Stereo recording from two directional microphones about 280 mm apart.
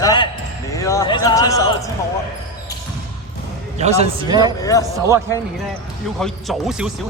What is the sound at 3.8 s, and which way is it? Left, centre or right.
Speech, right.